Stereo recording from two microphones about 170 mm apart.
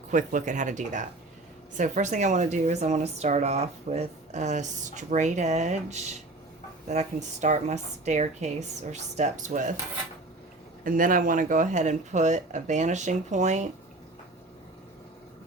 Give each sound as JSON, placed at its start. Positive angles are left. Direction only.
{"t": 0.1, "sound": "speech", "side_deg": -50}
{"t": 10.8, "sound": "speech", "side_deg": -55}